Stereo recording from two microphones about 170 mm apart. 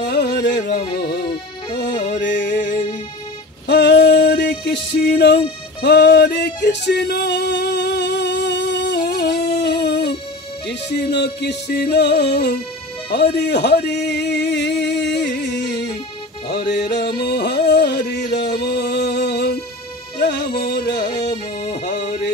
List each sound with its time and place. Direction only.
0.1 s music: 75° left (ahead or behind)
2.2 s music: 90° left
3.6 s female singing: 85° left
4.5 s music: 55° left (ahead or behind)
5.2 s speech: 80° left
6.4 s music: 90° left
11.7 s music: 65° left (ahead or behind)
13.1 s a sound: 70° left (ahead or behind)
16.5 s music: 85° left
21.1 s music: 25° left (ahead or behind)
21.6 s music: 40° left (ahead or behind)